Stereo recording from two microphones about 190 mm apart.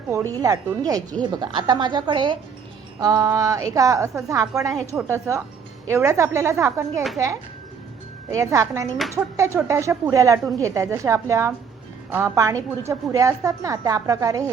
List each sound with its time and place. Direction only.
0.3 s a woman's voice: 20° right (ahead or behind)
8.3 s speech: 15° right (ahead or behind)